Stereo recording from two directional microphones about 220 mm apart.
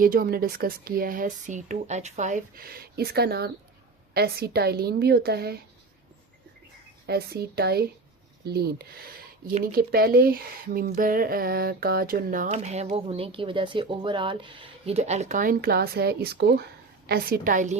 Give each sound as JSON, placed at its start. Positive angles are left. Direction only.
{"t": 0.0, "sound": "a woman's voice", "side_deg": -40}
{"t": 7.1, "sound": "a woman's voice", "side_deg": -45}